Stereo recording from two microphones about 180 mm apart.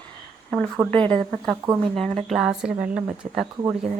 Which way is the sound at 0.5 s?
5° left (ahead or behind).